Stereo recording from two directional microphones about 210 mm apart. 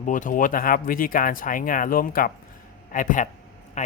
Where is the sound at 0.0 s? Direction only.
40° left (ahead or behind).